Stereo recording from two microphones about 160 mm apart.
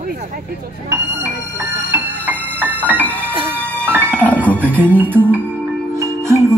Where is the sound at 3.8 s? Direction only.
15° right (ahead or behind).